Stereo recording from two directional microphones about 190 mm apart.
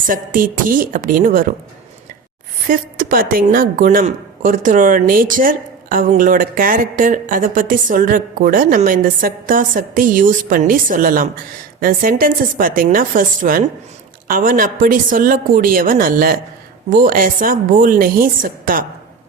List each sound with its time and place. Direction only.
0.0 s a woman's voice: 45° right (ahead or behind)
2.6 s a woman's voice: 45° right (ahead or behind)